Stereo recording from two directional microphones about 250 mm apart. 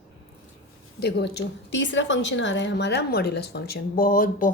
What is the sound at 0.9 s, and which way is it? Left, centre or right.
A woman's voice, left.